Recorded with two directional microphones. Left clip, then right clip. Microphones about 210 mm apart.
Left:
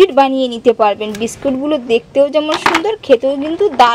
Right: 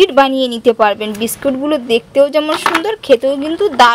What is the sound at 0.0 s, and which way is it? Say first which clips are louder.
Speech: even; centre (ahead or behind).